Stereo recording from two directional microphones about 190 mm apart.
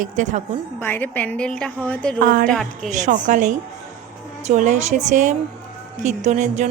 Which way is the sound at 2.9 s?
40° right (ahead or behind).